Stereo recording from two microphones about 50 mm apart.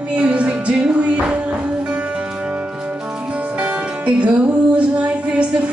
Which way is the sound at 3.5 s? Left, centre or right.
Right.